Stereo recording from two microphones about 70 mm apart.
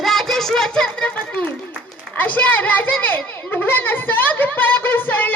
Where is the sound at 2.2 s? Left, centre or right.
Left.